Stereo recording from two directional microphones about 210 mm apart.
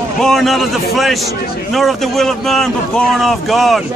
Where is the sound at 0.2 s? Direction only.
Centre (ahead or behind).